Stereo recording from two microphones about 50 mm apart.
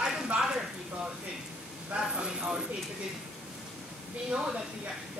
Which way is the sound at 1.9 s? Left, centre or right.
Centre.